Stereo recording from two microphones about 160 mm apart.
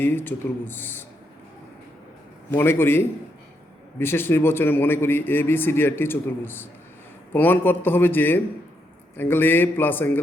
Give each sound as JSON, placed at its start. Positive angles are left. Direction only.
{"t": 0.0, "sound": "a man's voice", "side_deg": 15}
{"t": 2.5, "sound": "a man's voice", "side_deg": 15}